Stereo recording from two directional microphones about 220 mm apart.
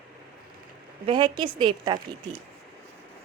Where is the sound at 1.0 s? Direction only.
20° right (ahead or behind).